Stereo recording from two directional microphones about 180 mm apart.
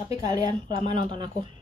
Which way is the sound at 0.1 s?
20° right (ahead or behind).